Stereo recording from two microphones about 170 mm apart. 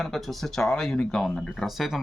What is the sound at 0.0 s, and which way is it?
Speech, centre (ahead or behind).